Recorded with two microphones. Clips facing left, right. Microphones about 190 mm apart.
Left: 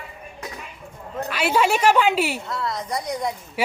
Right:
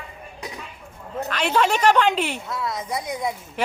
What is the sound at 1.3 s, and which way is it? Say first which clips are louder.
A man's voice: left 1 dB; 10° left (ahead or behind).